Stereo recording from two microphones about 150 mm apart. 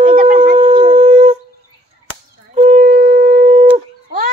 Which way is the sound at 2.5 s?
50° right (ahead or behind).